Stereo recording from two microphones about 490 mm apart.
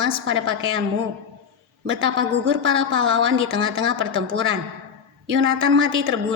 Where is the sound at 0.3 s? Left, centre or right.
Right.